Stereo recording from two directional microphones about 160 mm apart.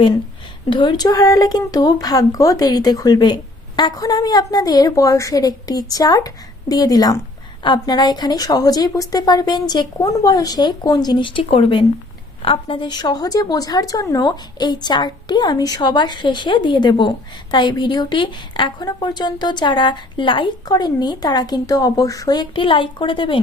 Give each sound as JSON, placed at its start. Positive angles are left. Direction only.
{"t": 0.7, "sound": "a woman's voice", "side_deg": 30}